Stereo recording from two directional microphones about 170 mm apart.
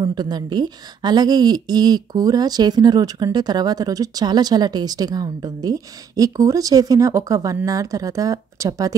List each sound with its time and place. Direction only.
0.0 s a woman's voice: 25° right (ahead or behind)